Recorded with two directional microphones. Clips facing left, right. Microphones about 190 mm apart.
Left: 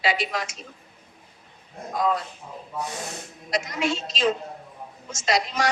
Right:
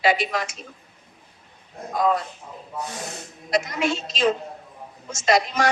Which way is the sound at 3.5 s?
55° right (ahead or behind).